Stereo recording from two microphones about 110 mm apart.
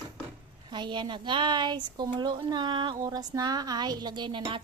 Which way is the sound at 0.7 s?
45° right (ahead or behind).